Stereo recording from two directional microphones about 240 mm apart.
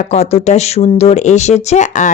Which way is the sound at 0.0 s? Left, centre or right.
Left.